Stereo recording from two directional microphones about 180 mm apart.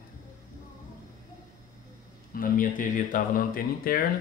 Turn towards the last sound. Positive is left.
turn(degrees=50)  # may be behind; listen again after turning